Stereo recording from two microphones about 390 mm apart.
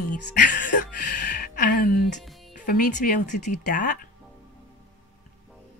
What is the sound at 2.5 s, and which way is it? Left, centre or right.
Speech, left.